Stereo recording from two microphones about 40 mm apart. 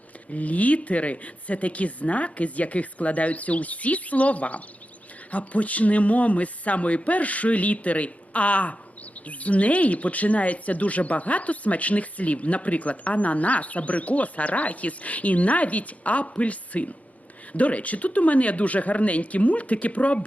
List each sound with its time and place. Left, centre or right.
0.3 s speech: left